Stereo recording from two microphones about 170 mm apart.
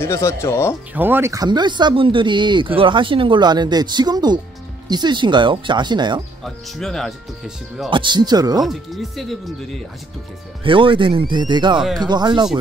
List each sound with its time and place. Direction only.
0.0 s speech: 15° left (ahead or behind)
0.9 s speech: 10° right (ahead or behind)
6.4 s speech: centre (ahead or behind)
7.9 s speech: 25° right (ahead or behind)
8.6 s speech: centre (ahead or behind)
10.6 s speech: 30° right (ahead or behind)